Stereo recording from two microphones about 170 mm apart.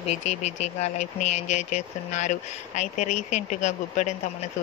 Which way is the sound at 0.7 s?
40° left (ahead or behind).